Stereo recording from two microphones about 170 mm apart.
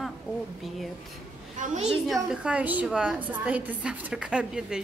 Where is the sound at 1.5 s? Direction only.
45° right (ahead or behind).